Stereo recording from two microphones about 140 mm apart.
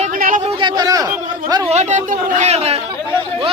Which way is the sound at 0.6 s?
30° right (ahead or behind).